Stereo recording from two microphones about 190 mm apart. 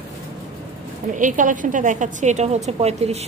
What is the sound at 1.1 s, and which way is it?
A woman's voice, 45° right (ahead or behind).